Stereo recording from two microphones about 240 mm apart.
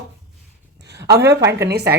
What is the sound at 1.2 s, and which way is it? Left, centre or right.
Speech, centre.